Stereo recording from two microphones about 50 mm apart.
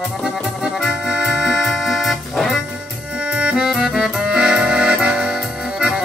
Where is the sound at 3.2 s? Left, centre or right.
Right.